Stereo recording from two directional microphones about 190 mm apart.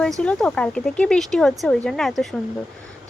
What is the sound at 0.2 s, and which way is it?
A woman's voice, 5° left (ahead or behind).